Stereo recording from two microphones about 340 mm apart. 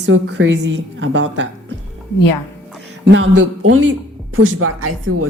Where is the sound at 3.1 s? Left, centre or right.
Right.